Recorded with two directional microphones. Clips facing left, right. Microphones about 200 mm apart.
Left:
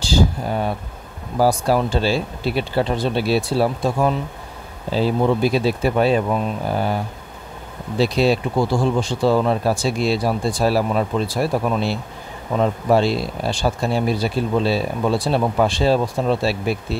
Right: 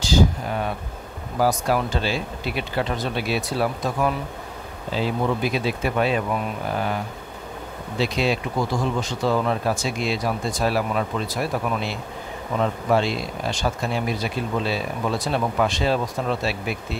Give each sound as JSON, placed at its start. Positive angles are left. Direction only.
{"t": 0.0, "sound": "speech", "side_deg": 30}
{"t": 8.0, "sound": "speech", "side_deg": 35}